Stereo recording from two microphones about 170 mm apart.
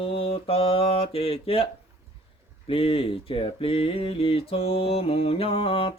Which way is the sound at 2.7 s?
35° left (ahead or behind).